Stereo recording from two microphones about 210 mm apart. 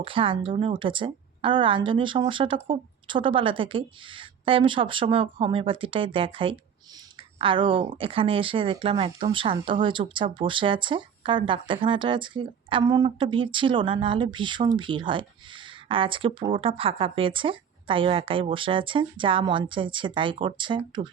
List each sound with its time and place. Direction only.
0.0 s speech: 25° right (ahead or behind)